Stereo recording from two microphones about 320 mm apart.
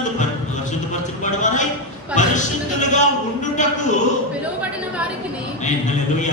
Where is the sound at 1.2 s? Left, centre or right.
Left.